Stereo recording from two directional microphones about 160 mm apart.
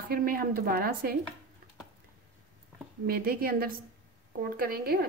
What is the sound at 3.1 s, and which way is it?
Speech, 65° right (ahead or behind).